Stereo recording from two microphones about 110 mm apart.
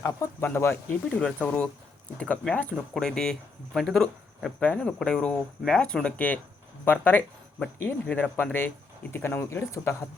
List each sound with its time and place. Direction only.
0.0 s speech: 25° left (ahead or behind)